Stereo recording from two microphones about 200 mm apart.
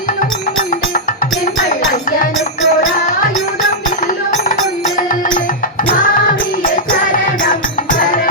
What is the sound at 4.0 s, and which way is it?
Music, 40° left (ahead or behind).